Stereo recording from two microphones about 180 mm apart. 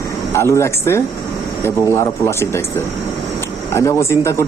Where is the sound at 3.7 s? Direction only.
15° left (ahead or behind).